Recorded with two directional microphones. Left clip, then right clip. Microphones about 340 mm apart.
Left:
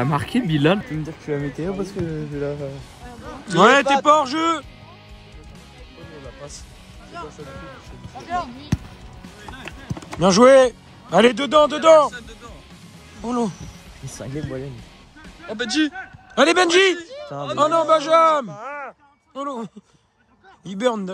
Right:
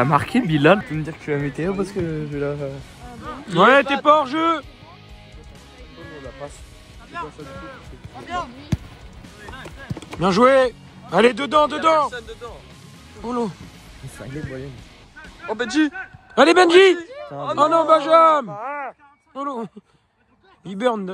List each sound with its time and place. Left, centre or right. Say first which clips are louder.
0.0 s speech: right 4 dB; centre
1.0 s speech: right 2 dB; centre
3.5 s speech: even; centre
8.7 s basketball bounce: left 2 dB; centre
10.2 s speech: left 3 dB; centre
12.1 s music: right 3 dB; centre
13.2 s speech: left 1 dB; centre
15.5 s speech: right 1 dB; centre
15.9 s a man's voice: right 2 dB; centre
17.0 s a sound: even; centre
17.6 s speech: right 1 dB; centre
18.5 s a sound: right 3 dB; centre
19.3 s speech: right 1 dB; centre